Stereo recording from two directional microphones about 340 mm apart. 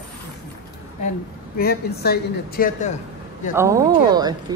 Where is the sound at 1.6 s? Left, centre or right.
Left.